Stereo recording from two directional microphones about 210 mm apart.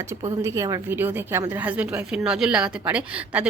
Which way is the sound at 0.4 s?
15° right (ahead or behind).